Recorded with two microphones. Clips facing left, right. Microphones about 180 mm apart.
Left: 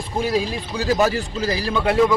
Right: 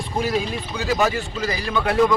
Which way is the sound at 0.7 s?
35° left (ahead or behind).